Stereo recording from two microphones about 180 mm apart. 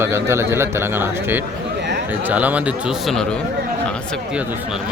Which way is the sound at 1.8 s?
70° right (ahead or behind).